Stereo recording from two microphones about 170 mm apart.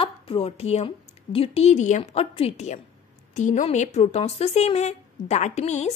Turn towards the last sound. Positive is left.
turn(degrees=40)  # may be behind; listen again after turning